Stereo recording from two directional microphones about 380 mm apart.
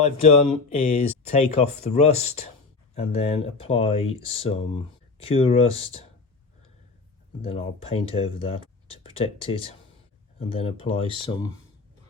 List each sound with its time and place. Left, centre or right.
0.0 s speech: centre
7.4 s speech: centre